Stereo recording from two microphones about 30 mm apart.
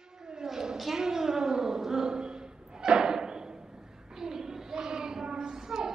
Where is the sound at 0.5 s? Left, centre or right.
Centre.